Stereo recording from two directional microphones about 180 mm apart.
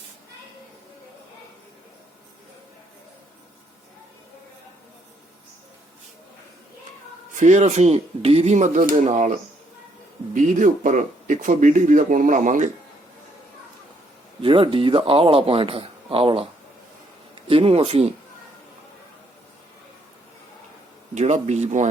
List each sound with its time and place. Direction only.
7.3 s a man's voice: 40° right (ahead or behind)
10.3 s speech: 45° right (ahead or behind)
14.4 s a man's voice: 30° right (ahead or behind)
17.5 s a man's voice: 35° right (ahead or behind)
21.2 s a man's voice: 40° right (ahead or behind)